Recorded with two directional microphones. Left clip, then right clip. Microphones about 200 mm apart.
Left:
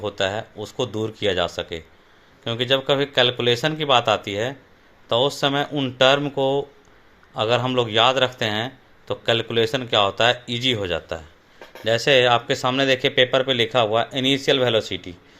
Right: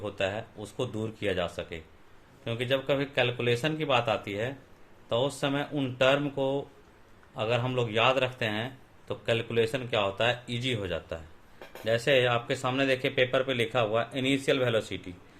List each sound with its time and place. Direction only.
0.0 s speech: 35° left (ahead or behind)